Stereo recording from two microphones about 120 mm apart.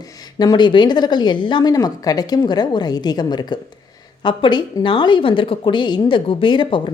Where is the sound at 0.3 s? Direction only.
35° left (ahead or behind).